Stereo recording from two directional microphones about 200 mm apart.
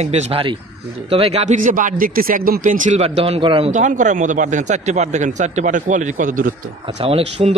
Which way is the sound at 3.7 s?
40° right (ahead or behind).